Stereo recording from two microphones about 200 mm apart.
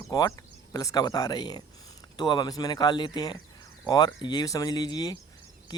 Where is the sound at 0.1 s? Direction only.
20° left (ahead or behind).